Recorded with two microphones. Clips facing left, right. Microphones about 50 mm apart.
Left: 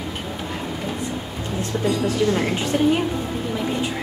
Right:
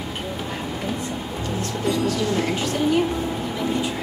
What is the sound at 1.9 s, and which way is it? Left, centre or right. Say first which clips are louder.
Speech: left 2 dB; left.